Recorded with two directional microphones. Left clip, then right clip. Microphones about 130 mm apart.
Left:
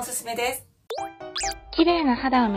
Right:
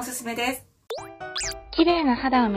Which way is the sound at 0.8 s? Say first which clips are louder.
Left 2 dB; centre (ahead or behind).